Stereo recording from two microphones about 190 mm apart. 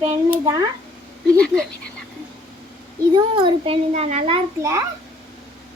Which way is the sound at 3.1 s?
25° right (ahead or behind).